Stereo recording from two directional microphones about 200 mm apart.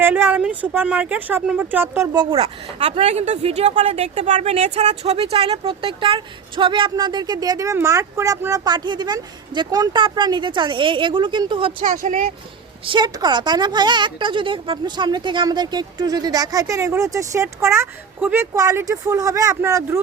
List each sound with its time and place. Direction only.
0.0 s a woman's voice: 10° right (ahead or behind)
2.1 s a woman's voice: 30° right (ahead or behind)
12.8 s a woman's voice: 25° right (ahead or behind)